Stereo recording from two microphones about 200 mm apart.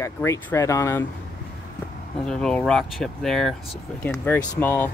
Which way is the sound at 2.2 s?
5° left (ahead or behind).